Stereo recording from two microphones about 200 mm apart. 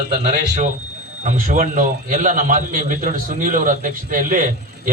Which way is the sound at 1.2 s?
35° right (ahead or behind).